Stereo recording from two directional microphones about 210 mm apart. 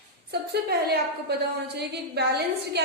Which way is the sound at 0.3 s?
50° right (ahead or behind).